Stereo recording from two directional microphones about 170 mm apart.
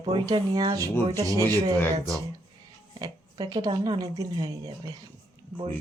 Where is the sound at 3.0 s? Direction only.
25° right (ahead or behind).